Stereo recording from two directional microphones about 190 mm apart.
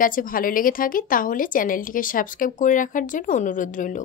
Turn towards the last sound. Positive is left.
turn(degrees=45)  # may be behind; listen again after turning